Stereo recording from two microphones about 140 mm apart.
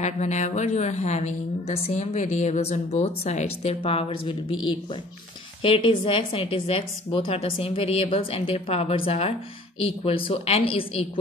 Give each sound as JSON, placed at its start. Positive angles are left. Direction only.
{"t": 0.0, "sound": "a woman's voice", "side_deg": 55}